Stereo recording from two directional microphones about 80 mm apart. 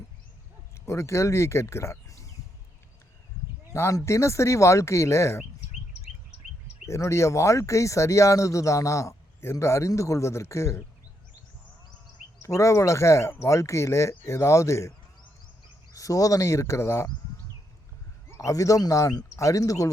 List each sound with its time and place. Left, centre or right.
0.9 s speech: left
3.7 s a man's voice: left
6.8 s a man's voice: left
12.4 s a man's voice: left
16.0 s a man's voice: left
18.3 s speech: left